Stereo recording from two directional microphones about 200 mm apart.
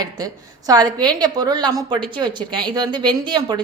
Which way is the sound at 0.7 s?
20° right (ahead or behind).